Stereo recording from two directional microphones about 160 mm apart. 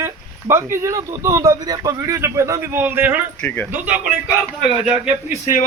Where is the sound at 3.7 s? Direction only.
10° right (ahead or behind).